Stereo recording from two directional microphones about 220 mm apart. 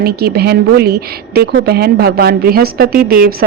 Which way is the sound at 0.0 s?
45° right (ahead or behind).